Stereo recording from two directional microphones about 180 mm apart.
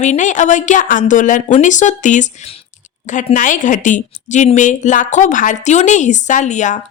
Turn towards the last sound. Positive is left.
turn(degrees=40)  # may be behind; listen again after turning